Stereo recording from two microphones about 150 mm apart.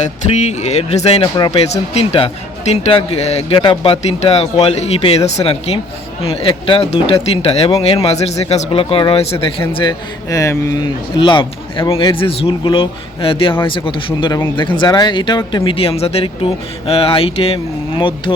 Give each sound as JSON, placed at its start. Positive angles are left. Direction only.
{"t": 0.0, "sound": "a man's voice", "side_deg": 50}
{"t": 10.2, "sound": "speech", "side_deg": 20}